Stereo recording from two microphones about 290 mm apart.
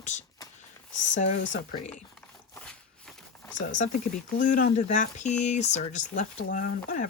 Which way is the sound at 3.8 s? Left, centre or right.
Left.